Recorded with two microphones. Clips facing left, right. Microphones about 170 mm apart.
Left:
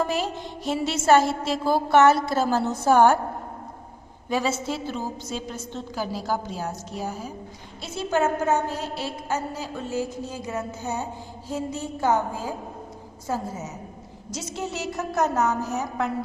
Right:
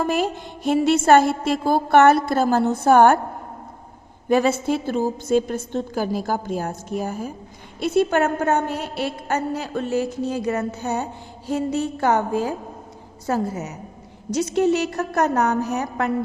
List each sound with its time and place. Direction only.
0.0 s music: 50° right (ahead or behind)
4.3 s a woman's voice: 55° right (ahead or behind)
14.3 s music: 60° right (ahead or behind)